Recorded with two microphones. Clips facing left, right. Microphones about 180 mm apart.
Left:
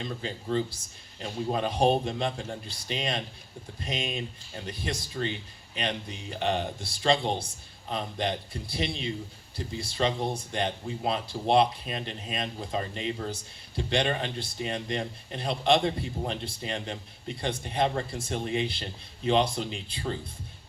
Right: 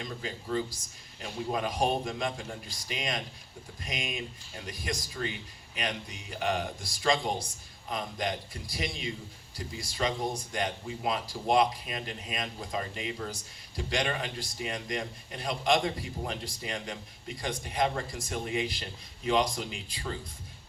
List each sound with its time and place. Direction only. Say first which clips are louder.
0.0 s speech: left 3 dB; 30° left (ahead or behind)